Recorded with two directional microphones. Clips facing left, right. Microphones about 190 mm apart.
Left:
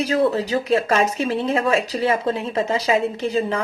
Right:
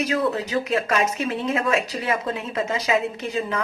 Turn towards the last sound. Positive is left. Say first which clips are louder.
# left 5 dB
turn(degrees=30)  # may be behind; listen again after turning